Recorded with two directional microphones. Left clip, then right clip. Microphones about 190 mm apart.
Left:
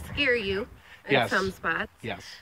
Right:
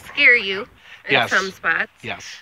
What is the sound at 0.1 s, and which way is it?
Speech, 20° left (ahead or behind).